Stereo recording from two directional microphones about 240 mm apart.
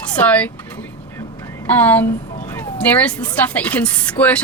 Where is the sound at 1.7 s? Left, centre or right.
Centre.